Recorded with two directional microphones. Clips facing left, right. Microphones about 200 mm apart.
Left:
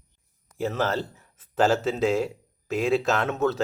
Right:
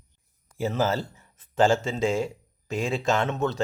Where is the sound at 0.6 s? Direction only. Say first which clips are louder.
Right 1 dB; centre (ahead or behind).